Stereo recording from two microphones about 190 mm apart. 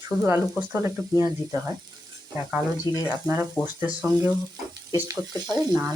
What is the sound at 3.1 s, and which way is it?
Speech, 15° right (ahead or behind).